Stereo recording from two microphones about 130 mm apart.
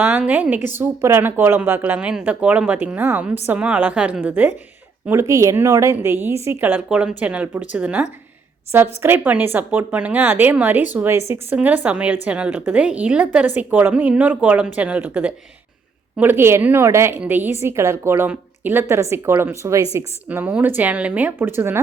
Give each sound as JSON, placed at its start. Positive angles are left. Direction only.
{"t": 0.0, "sound": "a woman's voice", "side_deg": -15}
{"t": 20.2, "sound": "a woman's voice", "side_deg": -10}